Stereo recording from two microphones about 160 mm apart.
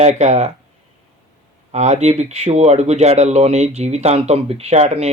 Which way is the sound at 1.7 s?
45° right (ahead or behind).